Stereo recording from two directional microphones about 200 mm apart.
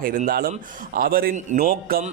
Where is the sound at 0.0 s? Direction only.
45° right (ahead or behind).